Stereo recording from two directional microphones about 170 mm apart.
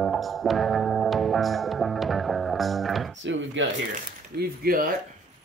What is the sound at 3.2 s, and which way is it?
Speech, 90° right.